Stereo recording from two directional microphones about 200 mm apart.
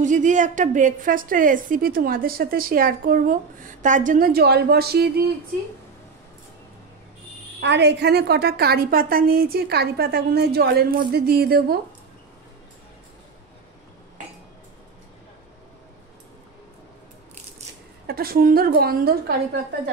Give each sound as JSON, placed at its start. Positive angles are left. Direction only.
{"t": 0.0, "sound": "a woman's voice", "side_deg": -40}
{"t": 7.6, "sound": "a woman's voice", "side_deg": -60}
{"t": 18.0, "sound": "a woman's voice", "side_deg": -50}